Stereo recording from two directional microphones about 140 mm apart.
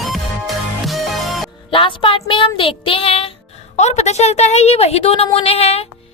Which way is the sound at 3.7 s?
55° left (ahead or behind).